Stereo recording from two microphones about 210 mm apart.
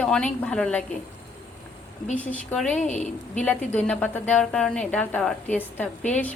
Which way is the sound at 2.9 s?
35° left (ahead or behind).